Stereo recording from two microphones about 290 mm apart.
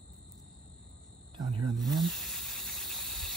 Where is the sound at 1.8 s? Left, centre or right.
Centre.